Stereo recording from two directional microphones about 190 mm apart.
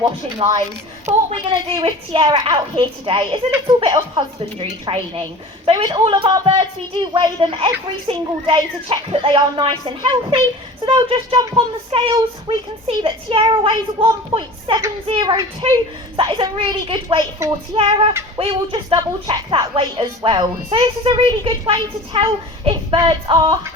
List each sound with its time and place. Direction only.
0.4 s speech: 30° right (ahead or behind)